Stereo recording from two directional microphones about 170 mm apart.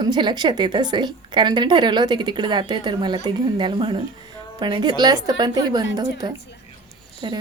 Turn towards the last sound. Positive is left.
turn(degrees=-25)  # may be behind; listen again after turning